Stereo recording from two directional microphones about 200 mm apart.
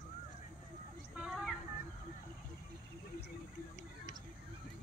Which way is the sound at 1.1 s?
5° right (ahead or behind).